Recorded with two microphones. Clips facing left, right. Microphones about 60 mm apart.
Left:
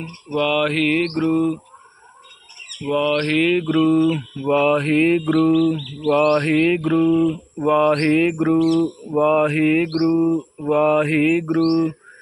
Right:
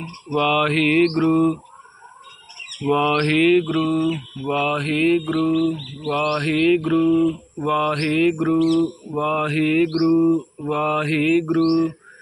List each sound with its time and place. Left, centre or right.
0.3 s mantra: centre
2.9 s a sound: centre
3.2 s mantra: centre
3.6 s mantra: left
6.1 s mantra: centre
7.1 s mantra: left
7.6 s mantra: left
9.9 s mantra: centre